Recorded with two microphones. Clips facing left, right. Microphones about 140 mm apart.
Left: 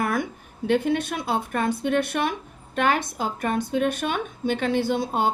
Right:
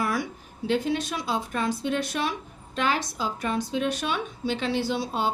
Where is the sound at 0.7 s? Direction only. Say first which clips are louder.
Left 3 dB; 55° left (ahead or behind).